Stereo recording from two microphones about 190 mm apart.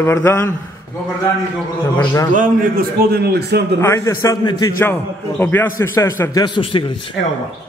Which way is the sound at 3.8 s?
15° left (ahead or behind).